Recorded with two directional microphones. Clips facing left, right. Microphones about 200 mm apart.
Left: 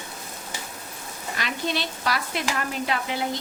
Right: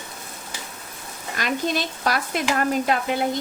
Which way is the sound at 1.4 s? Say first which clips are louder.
Right 4 dB; 45° right (ahead or behind).